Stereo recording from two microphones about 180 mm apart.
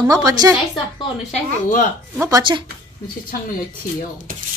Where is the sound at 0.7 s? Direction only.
30° left (ahead or behind).